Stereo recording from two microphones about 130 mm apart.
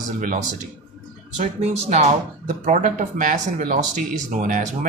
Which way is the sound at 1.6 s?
55° right (ahead or behind).